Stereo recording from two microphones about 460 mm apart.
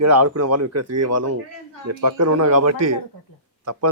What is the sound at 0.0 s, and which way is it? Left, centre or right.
A man's voice, right.